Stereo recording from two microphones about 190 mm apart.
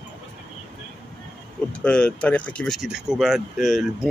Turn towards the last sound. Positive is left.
turn(degrees=0)  # may be behind; listen again after turning